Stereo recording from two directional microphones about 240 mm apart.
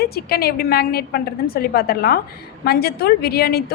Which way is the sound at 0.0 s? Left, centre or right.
Left.